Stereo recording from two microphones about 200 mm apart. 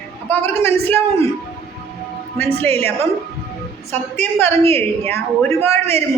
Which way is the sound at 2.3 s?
10° left (ahead or behind).